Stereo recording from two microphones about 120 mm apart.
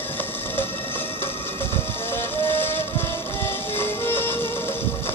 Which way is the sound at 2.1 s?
20° left (ahead or behind).